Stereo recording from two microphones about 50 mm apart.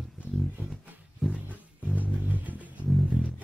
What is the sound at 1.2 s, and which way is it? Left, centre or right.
Roaring cats, right.